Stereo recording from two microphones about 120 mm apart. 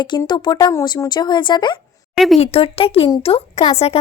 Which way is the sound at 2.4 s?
55° left (ahead or behind).